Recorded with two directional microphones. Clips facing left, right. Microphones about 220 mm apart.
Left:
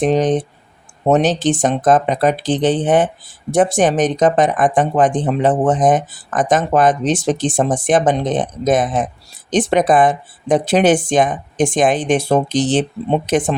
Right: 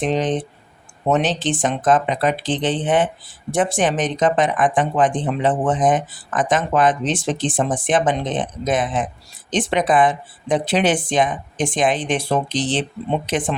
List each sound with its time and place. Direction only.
0.0 s speech: 40° left (ahead or behind)